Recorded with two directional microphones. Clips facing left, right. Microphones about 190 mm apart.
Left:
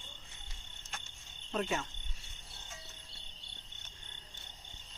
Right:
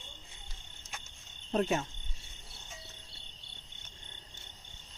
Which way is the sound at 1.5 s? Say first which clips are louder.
Right 5 dB; 35° right (ahead or behind).